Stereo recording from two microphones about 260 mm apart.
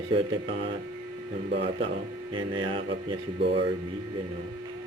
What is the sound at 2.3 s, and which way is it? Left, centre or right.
Music, centre.